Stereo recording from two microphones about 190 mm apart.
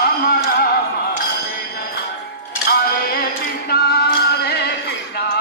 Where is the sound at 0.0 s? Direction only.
55° left (ahead or behind).